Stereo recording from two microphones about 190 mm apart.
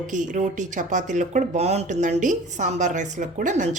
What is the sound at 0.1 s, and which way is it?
Speech, 40° right (ahead or behind).